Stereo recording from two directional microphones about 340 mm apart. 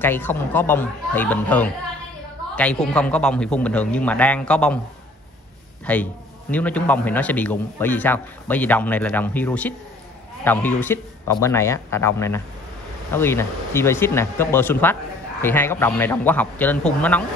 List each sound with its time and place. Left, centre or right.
0.0 s a man's voice: centre
5.9 s a man's voice: centre